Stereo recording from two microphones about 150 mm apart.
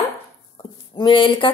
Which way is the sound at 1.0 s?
35° left (ahead or behind).